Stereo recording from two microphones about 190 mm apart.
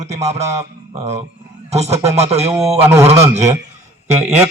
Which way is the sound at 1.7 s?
35° right (ahead or behind).